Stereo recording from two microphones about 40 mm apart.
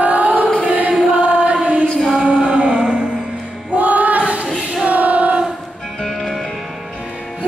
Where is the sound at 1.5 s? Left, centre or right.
Right.